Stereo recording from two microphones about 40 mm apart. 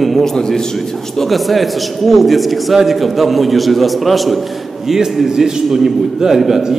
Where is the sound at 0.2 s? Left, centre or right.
Centre.